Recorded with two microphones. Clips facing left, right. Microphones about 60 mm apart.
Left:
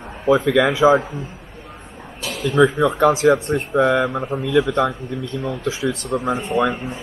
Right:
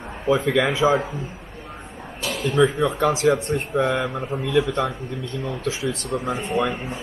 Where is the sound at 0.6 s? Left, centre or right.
Left.